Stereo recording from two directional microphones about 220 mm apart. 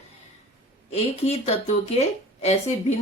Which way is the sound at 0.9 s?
30° left (ahead or behind).